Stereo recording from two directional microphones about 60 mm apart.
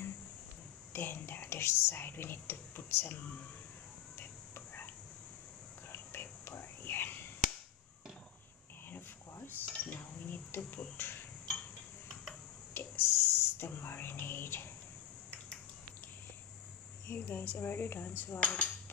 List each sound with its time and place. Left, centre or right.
0.9 s whispering: left
4.2 s a sound: left
5.9 s whispering: left
9.7 s a sound: left
12.7 s whispering: left
17.1 s speech: left
18.4 s cutlery: left